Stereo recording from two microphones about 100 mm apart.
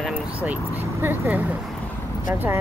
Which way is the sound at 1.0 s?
20° right (ahead or behind).